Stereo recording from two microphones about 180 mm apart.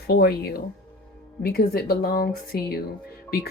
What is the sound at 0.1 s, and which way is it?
Speech, 60° left (ahead or behind).